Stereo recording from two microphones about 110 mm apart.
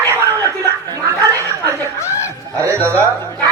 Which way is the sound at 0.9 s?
30° right (ahead or behind).